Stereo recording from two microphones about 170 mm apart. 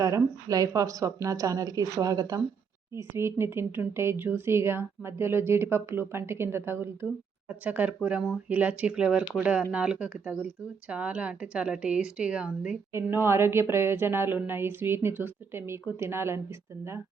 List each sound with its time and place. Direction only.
0.0 s a woman's voice: 20° right (ahead or behind)